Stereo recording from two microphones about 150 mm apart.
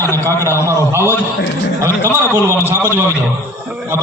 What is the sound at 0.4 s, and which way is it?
Speech, 20° left (ahead or behind).